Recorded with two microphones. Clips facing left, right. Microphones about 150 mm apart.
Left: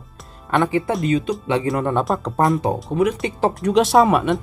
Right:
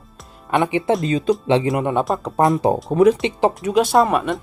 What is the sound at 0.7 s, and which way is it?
Speech, 20° right (ahead or behind).